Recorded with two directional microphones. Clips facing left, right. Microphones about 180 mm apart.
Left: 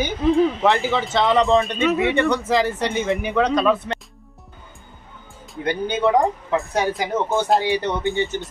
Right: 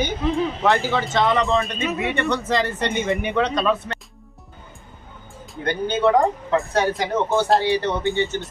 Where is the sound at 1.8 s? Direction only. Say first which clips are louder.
Left 5 dB; 80° left.